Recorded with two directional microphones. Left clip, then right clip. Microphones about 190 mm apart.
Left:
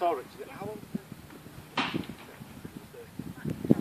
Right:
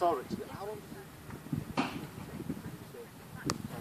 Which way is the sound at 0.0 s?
35° left (ahead or behind).